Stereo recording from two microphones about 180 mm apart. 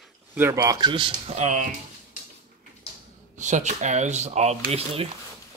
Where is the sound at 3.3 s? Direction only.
40° right (ahead or behind).